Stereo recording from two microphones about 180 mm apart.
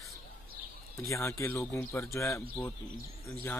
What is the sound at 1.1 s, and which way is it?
Speech, 15° left (ahead or behind).